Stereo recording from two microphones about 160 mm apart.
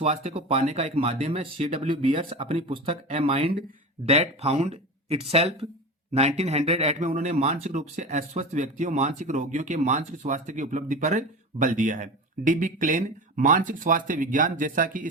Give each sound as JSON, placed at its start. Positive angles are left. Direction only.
{"t": 0.0, "sound": "speech", "side_deg": -40}